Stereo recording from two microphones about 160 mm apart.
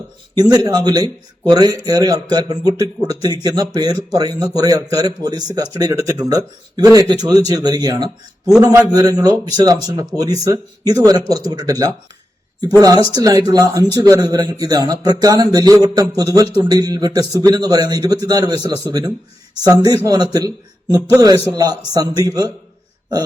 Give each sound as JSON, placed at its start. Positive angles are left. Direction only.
{"t": 0.4, "sound": "a man's voice", "side_deg": -20}
{"t": 13.1, "sound": "a man's voice", "side_deg": -25}